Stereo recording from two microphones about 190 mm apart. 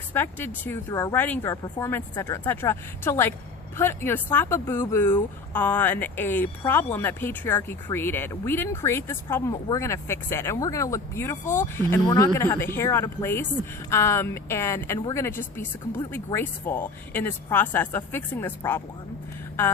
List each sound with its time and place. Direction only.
0.1 s speech: 10° left (ahead or behind)